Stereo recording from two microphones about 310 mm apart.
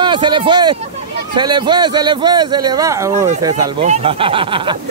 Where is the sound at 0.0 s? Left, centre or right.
Centre.